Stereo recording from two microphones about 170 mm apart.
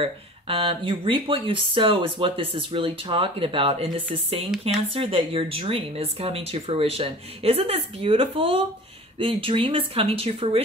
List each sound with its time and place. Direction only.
0.0 s speech: 35° right (ahead or behind)